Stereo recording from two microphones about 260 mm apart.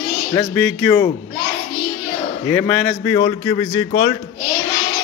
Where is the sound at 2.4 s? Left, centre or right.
Centre.